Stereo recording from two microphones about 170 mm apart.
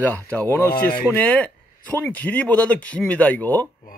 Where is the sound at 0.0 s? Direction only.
10° left (ahead or behind).